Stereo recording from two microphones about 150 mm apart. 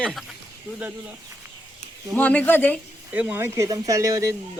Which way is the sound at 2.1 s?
10° left (ahead or behind).